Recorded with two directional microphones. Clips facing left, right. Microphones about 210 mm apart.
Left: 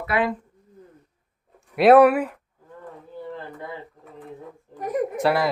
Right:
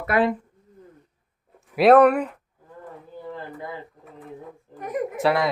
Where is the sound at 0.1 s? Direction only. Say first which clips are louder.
Right 2 dB; 50° right (ahead or behind).